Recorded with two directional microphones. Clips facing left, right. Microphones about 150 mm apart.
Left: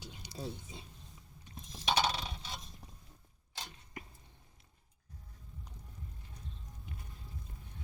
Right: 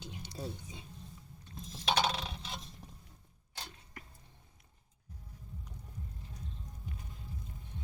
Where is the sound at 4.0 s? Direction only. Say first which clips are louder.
Left 5 dB; 15° left (ahead or behind).